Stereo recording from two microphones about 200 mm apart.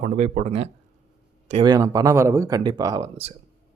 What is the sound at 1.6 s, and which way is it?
Speech, 20° right (ahead or behind).